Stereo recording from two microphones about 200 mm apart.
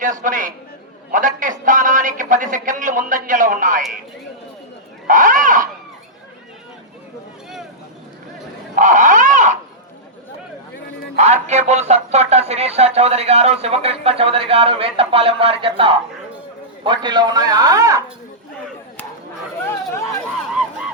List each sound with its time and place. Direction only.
0.0 s a man's voice: 40° right (ahead or behind)
5.0 s speech: 40° right (ahead or behind)
8.7 s a sound: 40° right (ahead or behind)
11.2 s a man's voice: 35° right (ahead or behind); by 18.0 s 15° right (ahead or behind)